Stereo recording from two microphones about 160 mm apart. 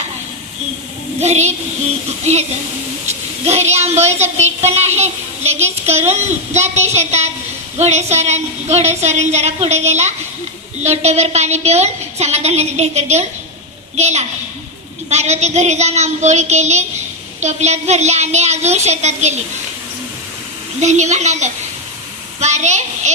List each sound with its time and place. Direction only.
1.2 s a woman's voice: 45° right (ahead or behind)
20.8 s a woman's voice: 45° right (ahead or behind)